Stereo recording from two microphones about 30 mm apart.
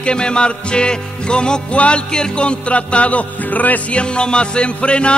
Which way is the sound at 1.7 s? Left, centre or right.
Left.